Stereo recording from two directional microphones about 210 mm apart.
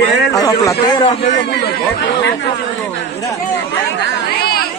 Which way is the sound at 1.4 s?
50° left (ahead or behind).